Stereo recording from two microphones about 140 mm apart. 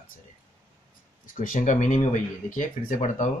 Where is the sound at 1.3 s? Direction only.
65° left (ahead or behind).